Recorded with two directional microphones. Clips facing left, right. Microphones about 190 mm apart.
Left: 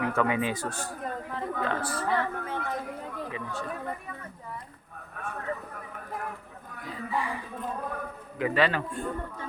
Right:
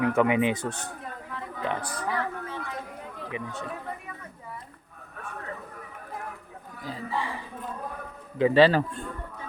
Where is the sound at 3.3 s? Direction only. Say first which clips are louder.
Right 1 dB; 20° right (ahead or behind).